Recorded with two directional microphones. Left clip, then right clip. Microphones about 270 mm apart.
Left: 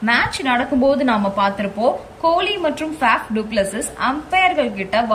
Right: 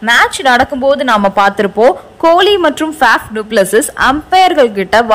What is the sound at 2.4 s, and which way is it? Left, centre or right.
A woman's voice, centre.